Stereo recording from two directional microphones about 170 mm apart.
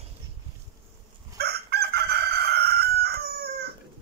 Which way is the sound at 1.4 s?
70° right (ahead or behind).